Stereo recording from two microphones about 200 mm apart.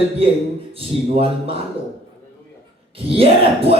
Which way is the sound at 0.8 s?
25° right (ahead or behind).